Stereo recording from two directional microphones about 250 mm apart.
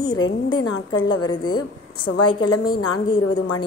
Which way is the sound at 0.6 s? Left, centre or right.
Left.